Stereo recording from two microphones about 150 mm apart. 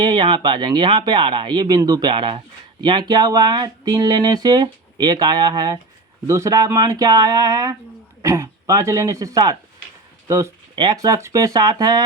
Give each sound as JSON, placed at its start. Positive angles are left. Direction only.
{"t": 0.0, "sound": "speech", "side_deg": -35}